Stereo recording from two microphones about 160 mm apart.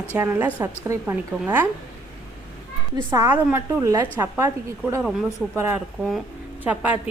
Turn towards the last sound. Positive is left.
turn(degrees=-10)  # may be behind; listen again after turning